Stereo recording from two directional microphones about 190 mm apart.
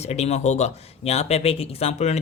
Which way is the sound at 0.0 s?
35° left (ahead or behind).